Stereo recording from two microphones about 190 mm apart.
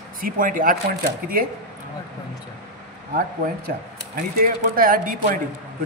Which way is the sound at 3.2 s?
50° right (ahead or behind).